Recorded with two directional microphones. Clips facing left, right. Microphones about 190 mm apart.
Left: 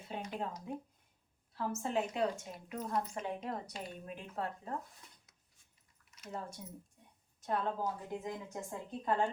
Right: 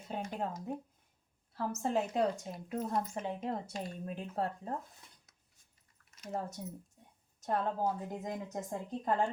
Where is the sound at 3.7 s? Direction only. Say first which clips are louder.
Right 4 dB; 40° right (ahead or behind).